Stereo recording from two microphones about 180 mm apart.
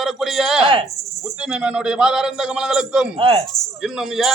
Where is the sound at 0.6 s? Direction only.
30° right (ahead or behind).